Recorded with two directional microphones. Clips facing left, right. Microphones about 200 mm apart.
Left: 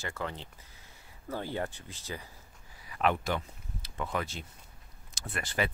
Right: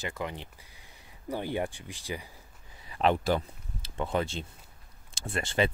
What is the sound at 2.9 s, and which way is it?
Speech, 30° right (ahead or behind).